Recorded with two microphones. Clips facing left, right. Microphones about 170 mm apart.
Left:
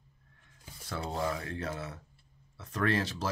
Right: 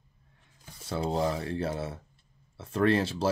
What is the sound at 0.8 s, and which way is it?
Speech, 25° right (ahead or behind).